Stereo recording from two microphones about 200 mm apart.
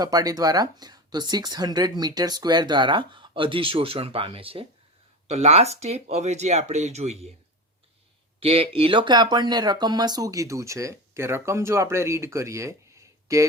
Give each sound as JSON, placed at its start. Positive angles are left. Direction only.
{"t": 0.0, "sound": "speech", "side_deg": -20}
{"t": 8.4, "sound": "speech", "side_deg": -30}